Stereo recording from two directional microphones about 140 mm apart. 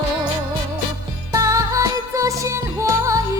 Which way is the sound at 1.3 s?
25° right (ahead or behind).